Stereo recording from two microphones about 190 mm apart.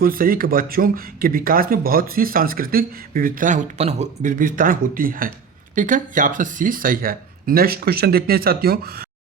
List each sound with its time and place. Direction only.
0.0 s speech: 50° right (ahead or behind)